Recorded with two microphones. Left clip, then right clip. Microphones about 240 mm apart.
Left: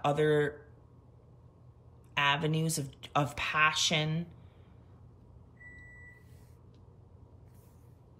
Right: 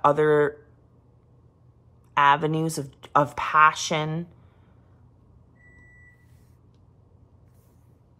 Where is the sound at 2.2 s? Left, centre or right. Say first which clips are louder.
Right 10 dB; centre.